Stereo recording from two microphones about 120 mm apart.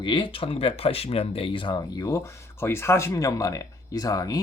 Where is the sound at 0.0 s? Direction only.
45° left (ahead or behind).